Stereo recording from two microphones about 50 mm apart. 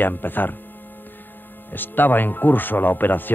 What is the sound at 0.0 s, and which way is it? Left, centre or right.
Speech, left.